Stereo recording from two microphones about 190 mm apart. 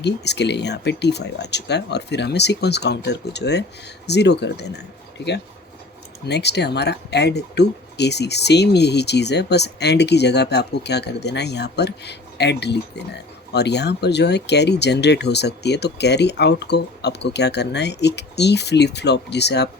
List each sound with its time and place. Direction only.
0.0 s speech: 65° left (ahead or behind)